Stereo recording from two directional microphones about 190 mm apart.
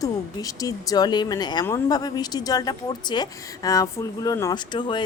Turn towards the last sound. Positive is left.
turn(degrees=25)  # may be behind; listen again after turning